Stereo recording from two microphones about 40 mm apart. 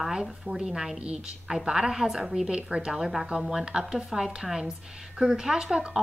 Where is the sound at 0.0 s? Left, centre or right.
Centre.